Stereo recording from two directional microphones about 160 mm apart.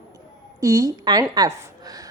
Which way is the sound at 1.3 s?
25° right (ahead or behind).